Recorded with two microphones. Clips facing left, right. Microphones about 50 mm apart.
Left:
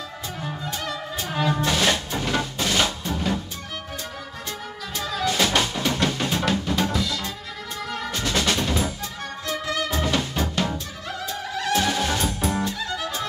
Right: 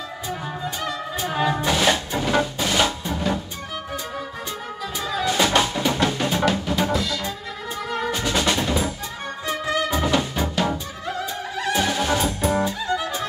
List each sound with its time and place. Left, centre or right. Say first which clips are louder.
0.5 s music: even; centre
4.9 s drum: right 2 dB; centre
7.9 s music: right 3 dB; centre
11.9 s music: right 2 dB; centre